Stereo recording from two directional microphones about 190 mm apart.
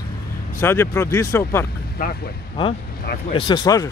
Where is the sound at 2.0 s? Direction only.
50° left (ahead or behind).